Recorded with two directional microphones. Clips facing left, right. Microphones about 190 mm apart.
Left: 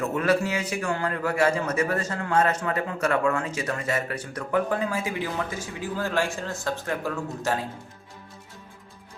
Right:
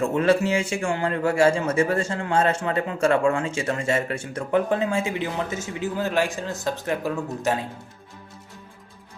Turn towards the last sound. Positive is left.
turn(degrees=-20)  # may be behind; listen again after turning